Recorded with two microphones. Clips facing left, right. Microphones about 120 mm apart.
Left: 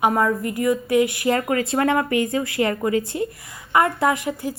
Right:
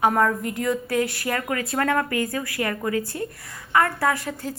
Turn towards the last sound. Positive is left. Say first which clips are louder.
# left 3 dB
turn(degrees=15)  # may be behind; listen again after turning